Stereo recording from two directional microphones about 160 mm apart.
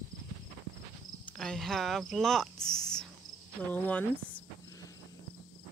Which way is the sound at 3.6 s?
10° left (ahead or behind).